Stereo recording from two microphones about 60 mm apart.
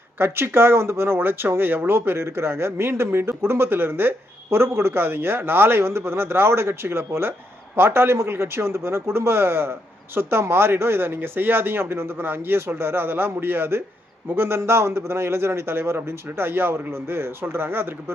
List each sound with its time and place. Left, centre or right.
0.2 s speech: right